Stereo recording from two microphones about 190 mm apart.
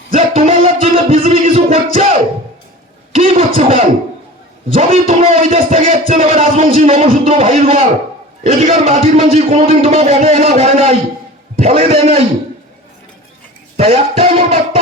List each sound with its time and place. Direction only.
0.1 s music: 30° right (ahead or behind)
3.2 s a sound: 30° right (ahead or behind)
4.7 s a man's voice: 30° right (ahead or behind)
13.7 s a man's voice: 30° right (ahead or behind)